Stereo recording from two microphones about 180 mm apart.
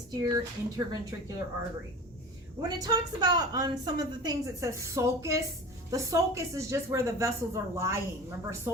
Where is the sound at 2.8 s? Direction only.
20° right (ahead or behind).